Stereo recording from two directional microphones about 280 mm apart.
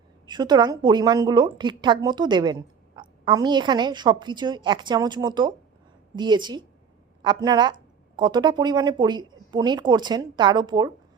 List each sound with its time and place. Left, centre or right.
0.3 s a woman's voice: centre